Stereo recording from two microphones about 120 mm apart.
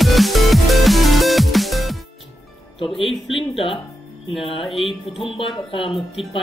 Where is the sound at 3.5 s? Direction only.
50° left (ahead or behind).